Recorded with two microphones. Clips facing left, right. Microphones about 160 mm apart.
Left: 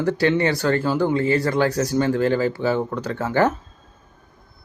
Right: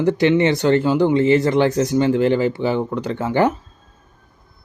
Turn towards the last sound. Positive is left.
turn(degrees=-15)  # may be behind; listen again after turning